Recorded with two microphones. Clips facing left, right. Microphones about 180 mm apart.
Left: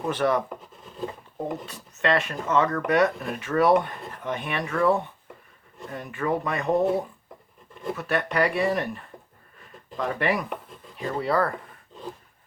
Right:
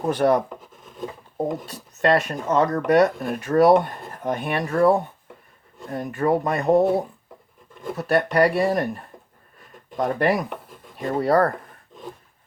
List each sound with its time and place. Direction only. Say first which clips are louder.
0.0 s speech: right 5 dB; 40° right (ahead or behind)
1.6 s speech: right 4 dB; 40° right (ahead or behind)
7.9 s speech: right 6 dB; 40° right (ahead or behind)